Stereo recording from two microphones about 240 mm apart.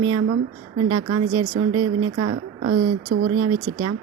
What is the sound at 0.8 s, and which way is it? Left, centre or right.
Speech, right.